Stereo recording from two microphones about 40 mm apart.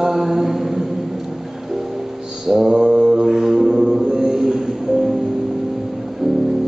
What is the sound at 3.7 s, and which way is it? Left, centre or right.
Music, centre.